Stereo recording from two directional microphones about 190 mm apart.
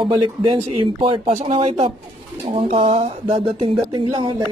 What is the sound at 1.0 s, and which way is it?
Speech, 35° right (ahead or behind).